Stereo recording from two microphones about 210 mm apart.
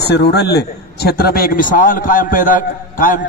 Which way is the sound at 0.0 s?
50° left (ahead or behind).